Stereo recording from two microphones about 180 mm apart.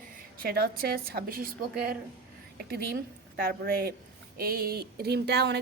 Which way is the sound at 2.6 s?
60° right (ahead or behind).